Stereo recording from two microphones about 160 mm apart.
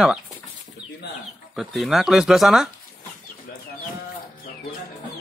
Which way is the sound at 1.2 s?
Centre (ahead or behind).